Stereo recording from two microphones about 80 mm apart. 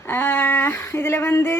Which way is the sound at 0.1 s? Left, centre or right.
Left.